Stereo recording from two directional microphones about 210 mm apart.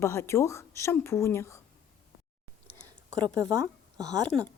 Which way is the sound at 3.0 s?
15° right (ahead or behind).